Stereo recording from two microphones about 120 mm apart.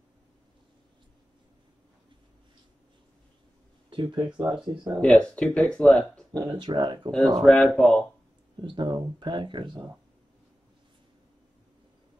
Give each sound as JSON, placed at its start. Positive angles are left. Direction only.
{"t": 3.9, "sound": "speech", "side_deg": -40}
{"t": 4.3, "sound": "speech", "side_deg": -10}
{"t": 5.0, "sound": "speech", "side_deg": 10}
{"t": 6.3, "sound": "speech", "side_deg": -35}
{"t": 7.1, "sound": "speech", "side_deg": 5}
{"t": 8.6, "sound": "speech", "side_deg": -35}